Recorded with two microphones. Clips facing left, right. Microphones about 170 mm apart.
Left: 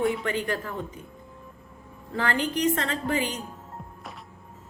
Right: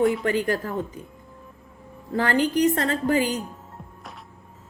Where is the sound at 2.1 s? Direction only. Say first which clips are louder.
Right 6 dB; 40° right (ahead or behind).